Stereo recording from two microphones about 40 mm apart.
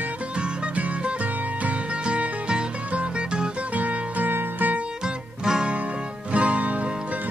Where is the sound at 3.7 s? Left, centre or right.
Right.